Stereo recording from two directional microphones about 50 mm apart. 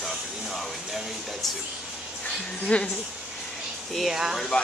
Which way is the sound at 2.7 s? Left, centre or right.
Left.